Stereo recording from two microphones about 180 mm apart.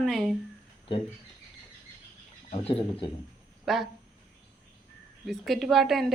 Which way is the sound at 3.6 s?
Centre (ahead or behind).